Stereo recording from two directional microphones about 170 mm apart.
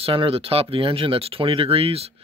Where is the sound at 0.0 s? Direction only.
30° right (ahead or behind).